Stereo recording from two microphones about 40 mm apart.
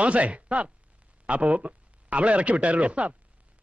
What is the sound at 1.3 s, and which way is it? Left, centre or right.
A man's voice, right.